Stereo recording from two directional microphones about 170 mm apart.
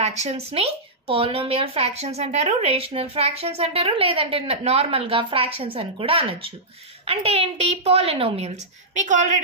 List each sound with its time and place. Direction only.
0.0 s a woman's voice: 40° right (ahead or behind)
8.9 s speech: 45° right (ahead or behind)